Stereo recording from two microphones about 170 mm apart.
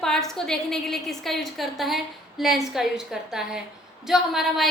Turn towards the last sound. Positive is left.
turn(degrees=0)  # may be behind; listen again after turning